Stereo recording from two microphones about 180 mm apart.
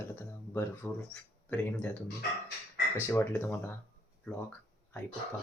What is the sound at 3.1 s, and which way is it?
Speech, 10° left (ahead or behind).